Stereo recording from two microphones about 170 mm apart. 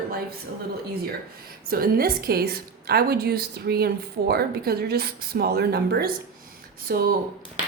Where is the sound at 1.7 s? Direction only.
60° right (ahead or behind).